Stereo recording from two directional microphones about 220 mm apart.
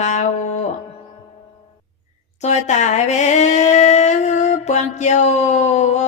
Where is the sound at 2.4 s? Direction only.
30° left (ahead or behind).